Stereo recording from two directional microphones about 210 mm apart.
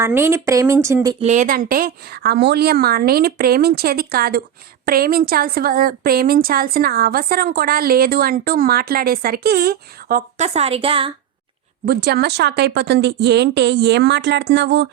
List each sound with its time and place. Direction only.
0.0 s speech: 10° right (ahead or behind)
1.2 s speech: 35° right (ahead or behind)
11.9 s speech: 50° right (ahead or behind)